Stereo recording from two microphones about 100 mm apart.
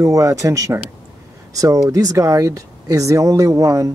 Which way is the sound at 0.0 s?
30° right (ahead or behind).